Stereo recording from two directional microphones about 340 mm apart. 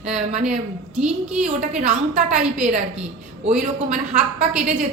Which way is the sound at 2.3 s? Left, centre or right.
Centre.